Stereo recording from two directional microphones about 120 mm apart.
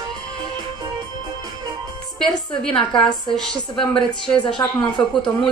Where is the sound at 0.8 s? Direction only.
35° right (ahead or behind).